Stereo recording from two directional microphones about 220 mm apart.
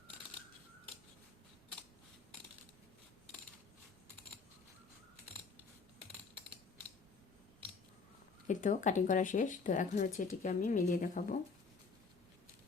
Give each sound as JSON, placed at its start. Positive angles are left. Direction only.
{"t": 8.4, "sound": "speech", "side_deg": 35}